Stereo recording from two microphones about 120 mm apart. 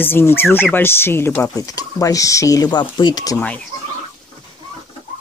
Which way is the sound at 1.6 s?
30° left (ahead or behind).